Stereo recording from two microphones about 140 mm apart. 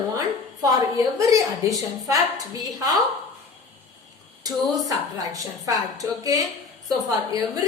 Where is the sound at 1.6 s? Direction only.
20° right (ahead or behind).